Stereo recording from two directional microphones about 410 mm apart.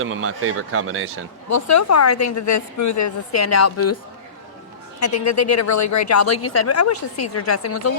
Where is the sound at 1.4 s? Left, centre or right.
Left.